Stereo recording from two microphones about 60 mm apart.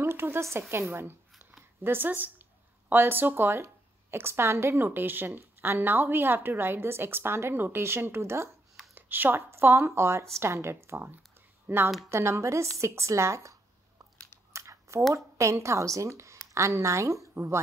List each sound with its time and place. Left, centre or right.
0.0 s a woman's voice: right
8.9 s speech: right
12.1 s a woman's voice: right
14.5 s a sound: right
15.1 s a woman's voice: right
17.3 s a sound: right